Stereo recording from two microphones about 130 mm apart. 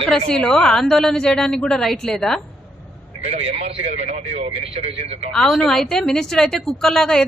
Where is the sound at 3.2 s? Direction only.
60° right (ahead or behind).